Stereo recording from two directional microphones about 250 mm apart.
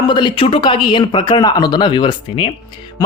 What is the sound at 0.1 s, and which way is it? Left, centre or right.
Speech, centre.